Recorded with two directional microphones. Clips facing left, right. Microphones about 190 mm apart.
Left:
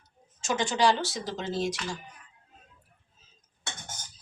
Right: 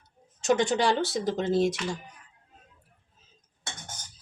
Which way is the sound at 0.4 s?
60° right (ahead or behind).